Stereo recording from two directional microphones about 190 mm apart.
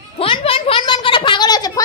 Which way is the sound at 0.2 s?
30° left (ahead or behind).